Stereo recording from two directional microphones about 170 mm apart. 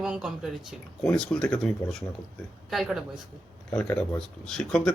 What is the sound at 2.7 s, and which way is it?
Speech, centre (ahead or behind).